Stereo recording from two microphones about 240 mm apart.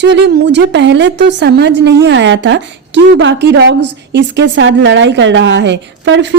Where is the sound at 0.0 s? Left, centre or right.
Right.